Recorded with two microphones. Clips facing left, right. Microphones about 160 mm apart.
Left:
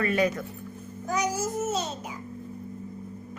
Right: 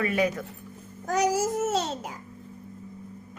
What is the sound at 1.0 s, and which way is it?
Child singing, 85° right.